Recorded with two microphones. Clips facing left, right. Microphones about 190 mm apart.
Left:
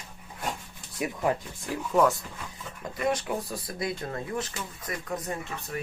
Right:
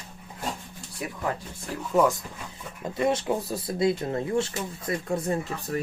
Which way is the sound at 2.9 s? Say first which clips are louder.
Right 4 dB; 25° right (ahead or behind).